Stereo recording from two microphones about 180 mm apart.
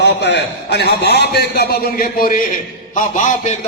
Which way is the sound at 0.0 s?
75° left (ahead or behind).